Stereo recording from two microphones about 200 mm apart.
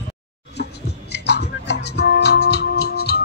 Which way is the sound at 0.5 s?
55° left (ahead or behind).